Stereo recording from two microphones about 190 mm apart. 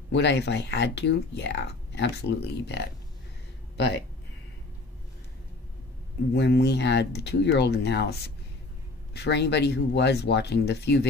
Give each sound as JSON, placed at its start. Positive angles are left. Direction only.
{"t": 0.1, "sound": "speech", "side_deg": 65}
{"t": 6.3, "sound": "speech", "side_deg": 60}